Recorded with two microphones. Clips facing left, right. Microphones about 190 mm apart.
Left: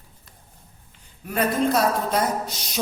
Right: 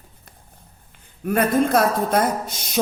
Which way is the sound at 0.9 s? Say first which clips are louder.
Right 9 dB; 55° right (ahead or behind).